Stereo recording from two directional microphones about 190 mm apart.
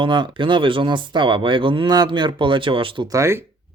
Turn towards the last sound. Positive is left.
turn(degrees=-15)  # may be behind; listen again after turning